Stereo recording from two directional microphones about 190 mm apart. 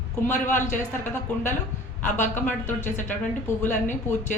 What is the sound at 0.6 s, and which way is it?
Speech, 40° left (ahead or behind).